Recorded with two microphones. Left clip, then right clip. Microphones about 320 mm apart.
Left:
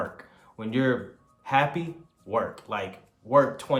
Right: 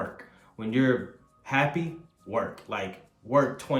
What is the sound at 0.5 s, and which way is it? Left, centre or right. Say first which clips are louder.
Speech: even; centre.